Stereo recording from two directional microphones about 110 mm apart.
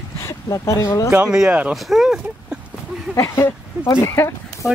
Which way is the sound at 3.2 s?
20° left (ahead or behind).